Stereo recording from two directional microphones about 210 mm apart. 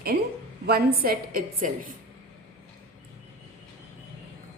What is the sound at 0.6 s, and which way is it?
A woman's voice, 45° right (ahead or behind).